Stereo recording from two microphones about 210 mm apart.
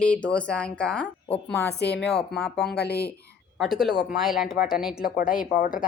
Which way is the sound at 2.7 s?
50° left (ahead or behind).